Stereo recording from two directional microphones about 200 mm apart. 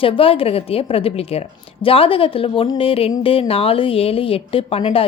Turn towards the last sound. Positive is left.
turn(degrees=30)  # may be behind; listen again after turning